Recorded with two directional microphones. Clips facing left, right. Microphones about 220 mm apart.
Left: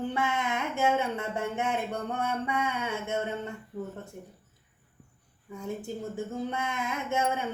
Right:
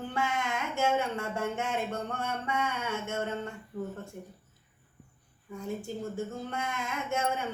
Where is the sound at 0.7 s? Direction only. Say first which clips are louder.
Left 1 dB; 15° left (ahead or behind).